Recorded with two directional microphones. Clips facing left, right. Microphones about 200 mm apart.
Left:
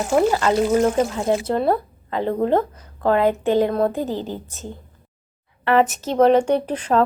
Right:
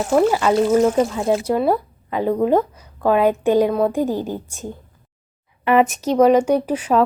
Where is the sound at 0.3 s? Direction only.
5° right (ahead or behind).